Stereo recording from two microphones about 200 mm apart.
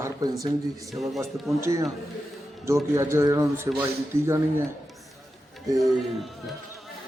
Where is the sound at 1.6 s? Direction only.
15° right (ahead or behind).